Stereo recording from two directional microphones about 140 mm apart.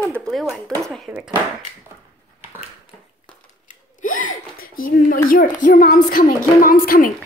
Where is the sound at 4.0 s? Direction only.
70° left (ahead or behind).